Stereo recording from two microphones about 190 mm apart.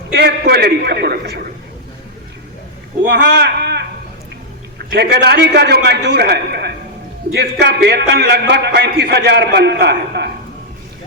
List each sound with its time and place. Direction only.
0.1 s a man's voice: 60° right (ahead or behind)
3.1 s speech: 60° right (ahead or behind)
4.9 s a man's voice: 60° right (ahead or behind)